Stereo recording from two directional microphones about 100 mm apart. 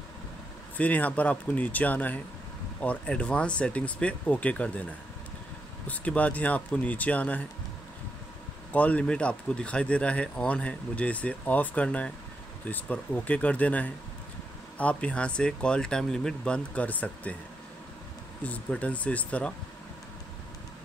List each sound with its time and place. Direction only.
0.7 s speech: 15° left (ahead or behind)
5.9 s speech: 15° left (ahead or behind)
8.7 s speech: 15° left (ahead or behind)
18.4 s speech: 15° left (ahead or behind)